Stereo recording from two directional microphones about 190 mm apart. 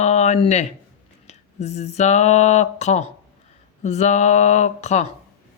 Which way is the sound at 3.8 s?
35° left (ahead or behind).